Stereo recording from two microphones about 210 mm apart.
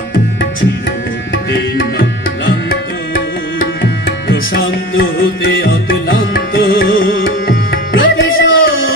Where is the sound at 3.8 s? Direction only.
45° left (ahead or behind).